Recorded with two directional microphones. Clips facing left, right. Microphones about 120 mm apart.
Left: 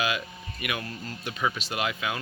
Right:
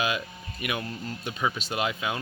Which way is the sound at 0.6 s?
30° right (ahead or behind).